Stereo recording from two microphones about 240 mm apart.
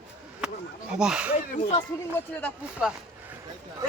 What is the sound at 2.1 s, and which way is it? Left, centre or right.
Speech, centre.